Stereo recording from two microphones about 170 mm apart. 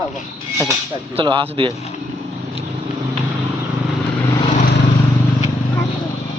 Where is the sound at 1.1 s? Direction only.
30° right (ahead or behind).